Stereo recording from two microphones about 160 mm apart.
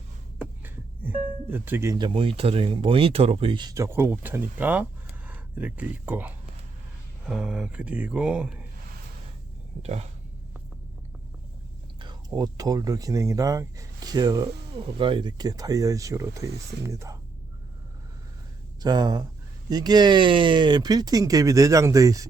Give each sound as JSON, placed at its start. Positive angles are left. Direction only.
{"t": 0.6, "sound": "music", "side_deg": -10}
{"t": 2.0, "sound": "speech", "side_deg": -30}
{"t": 9.8, "sound": "speech", "side_deg": -40}
{"t": 11.9, "sound": "speech", "side_deg": -25}
{"t": 18.8, "sound": "speech", "side_deg": -25}